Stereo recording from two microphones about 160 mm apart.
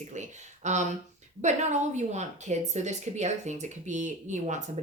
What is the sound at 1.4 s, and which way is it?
A woman's voice, 50° right (ahead or behind).